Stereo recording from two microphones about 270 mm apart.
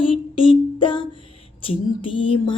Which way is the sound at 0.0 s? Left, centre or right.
Centre.